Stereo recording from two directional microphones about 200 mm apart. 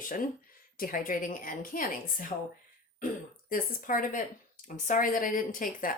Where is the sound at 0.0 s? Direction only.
45° left (ahead or behind).